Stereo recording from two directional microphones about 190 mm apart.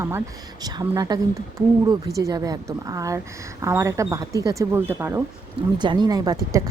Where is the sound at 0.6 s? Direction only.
20° right (ahead or behind).